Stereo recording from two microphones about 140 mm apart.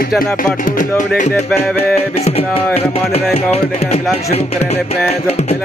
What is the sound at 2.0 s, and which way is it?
Music, 50° left (ahead or behind).